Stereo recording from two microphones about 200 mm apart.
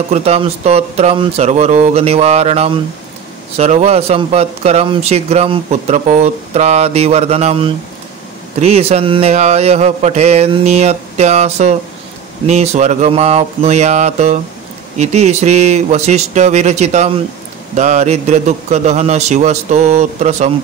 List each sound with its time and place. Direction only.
0.1 s speech: 30° right (ahead or behind)